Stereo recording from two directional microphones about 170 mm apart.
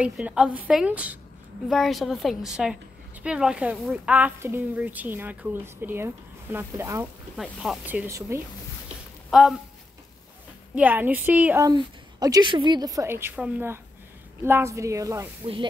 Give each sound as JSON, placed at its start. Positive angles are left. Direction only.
{"t": 0.0, "sound": "a woman's voice", "side_deg": -5}
{"t": 7.3, "sound": "a woman's voice", "side_deg": 0}
{"t": 9.3, "sound": "speech", "side_deg": 0}
{"t": 10.7, "sound": "a woman's voice", "side_deg": -10}
{"t": 11.6, "sound": "a woman's voice", "side_deg": -20}